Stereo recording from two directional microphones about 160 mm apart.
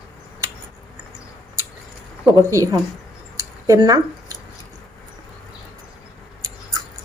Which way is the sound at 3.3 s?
20° right (ahead or behind).